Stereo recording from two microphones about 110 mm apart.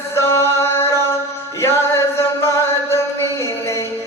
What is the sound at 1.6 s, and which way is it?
Chant, 25° left (ahead or behind).